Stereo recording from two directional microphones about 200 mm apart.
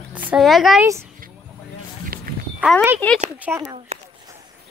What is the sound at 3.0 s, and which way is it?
Speech, 10° left (ahead or behind).